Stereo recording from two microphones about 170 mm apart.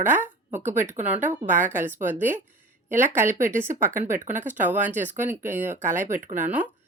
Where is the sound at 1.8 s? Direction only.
45° right (ahead or behind).